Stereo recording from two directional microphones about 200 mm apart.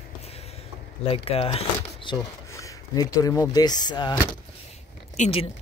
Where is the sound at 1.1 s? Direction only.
30° left (ahead or behind).